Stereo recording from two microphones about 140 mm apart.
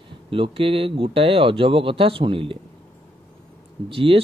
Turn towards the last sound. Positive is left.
turn(degrees=-40)  # may be behind; listen again after turning